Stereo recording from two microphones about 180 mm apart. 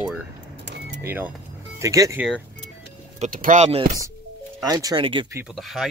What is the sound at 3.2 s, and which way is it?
Speech, 45° right (ahead or behind).